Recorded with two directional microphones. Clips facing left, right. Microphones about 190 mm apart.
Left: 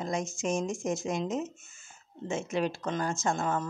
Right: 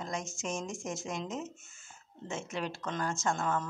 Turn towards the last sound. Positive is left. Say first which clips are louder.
# left 2 dB
turn(degrees=15)  # may be behind; listen again after turning